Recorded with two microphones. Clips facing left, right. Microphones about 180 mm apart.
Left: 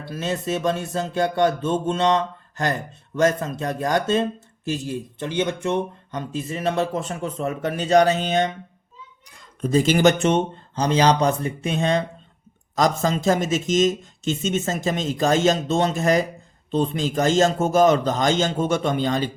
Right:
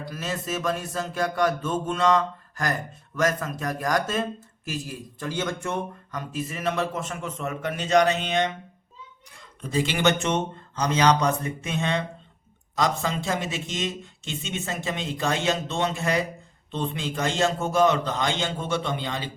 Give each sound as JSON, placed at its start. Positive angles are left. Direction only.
{"t": 0.0, "sound": "speech", "side_deg": 30}
{"t": 9.6, "sound": "speech", "side_deg": 40}